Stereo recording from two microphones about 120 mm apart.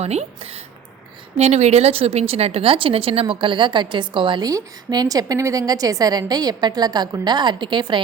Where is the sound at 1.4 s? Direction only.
65° right (ahead or behind); by 4.4 s 40° right (ahead or behind).